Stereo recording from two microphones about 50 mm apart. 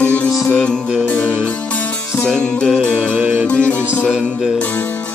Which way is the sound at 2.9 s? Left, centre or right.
Right.